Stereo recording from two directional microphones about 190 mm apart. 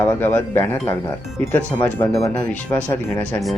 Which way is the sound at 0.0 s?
10° left (ahead or behind).